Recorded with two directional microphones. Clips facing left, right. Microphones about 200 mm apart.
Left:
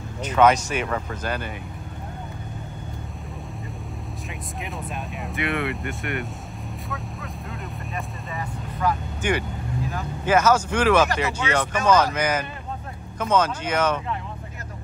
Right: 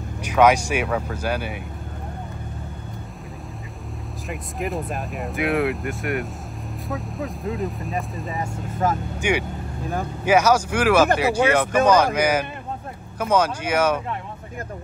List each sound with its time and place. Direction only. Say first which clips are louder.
0.2 s speech: right 1 dB; 10° right (ahead or behind)
4.3 s speech: right 9 dB; centre (ahead or behind)
7.5 s speech: right 5 dB; centre (ahead or behind)
8.8 s speech: right 2 dB; 45° right (ahead or behind)
9.2 s speech: right 1 dB; 10° right (ahead or behind)